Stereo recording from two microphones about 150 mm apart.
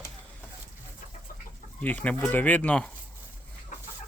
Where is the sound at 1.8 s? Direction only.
10° left (ahead or behind).